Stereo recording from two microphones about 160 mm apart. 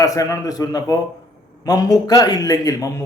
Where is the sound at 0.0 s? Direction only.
20° left (ahead or behind).